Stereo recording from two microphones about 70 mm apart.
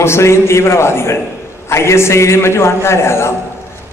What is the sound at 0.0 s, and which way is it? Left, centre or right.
A man's voice, left.